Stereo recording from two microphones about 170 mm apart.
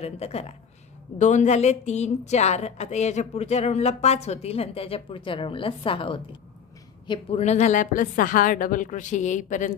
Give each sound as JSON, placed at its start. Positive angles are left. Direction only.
{"t": 0.0, "sound": "a woman's voice", "side_deg": 35}